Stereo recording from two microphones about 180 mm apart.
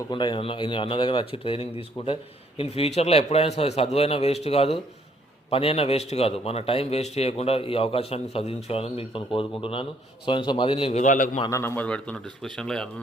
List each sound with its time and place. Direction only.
0.1 s a man's voice: 25° left (ahead or behind); by 11.4 s 45° left (ahead or behind)
11.4 s speech: 15° left (ahead or behind)